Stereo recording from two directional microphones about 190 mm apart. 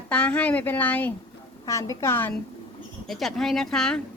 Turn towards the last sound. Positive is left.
turn(degrees=5)  # may be behind; listen again after turning